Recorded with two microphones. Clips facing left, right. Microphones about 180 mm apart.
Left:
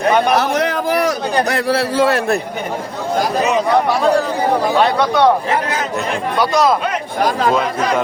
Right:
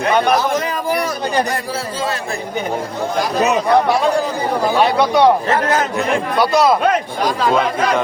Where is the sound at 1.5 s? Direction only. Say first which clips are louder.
Left 6 dB; 70° left (ahead or behind).